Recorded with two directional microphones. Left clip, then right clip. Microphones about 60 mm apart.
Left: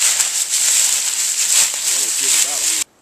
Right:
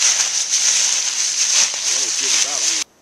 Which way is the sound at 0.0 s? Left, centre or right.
Centre.